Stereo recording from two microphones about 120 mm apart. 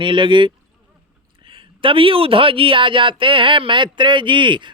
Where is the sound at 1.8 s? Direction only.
45° right (ahead or behind).